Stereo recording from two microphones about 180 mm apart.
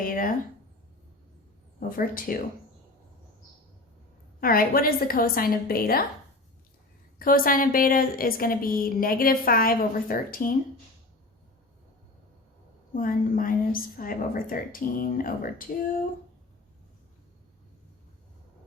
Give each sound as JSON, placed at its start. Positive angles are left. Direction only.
{"t": 0.0, "sound": "a woman's voice", "side_deg": 50}
{"t": 2.0, "sound": "a woman's voice", "side_deg": 50}
{"t": 4.4, "sound": "a woman's voice", "side_deg": 55}
{"t": 7.2, "sound": "a woman's voice", "side_deg": 50}
{"t": 12.9, "sound": "a woman's voice", "side_deg": 50}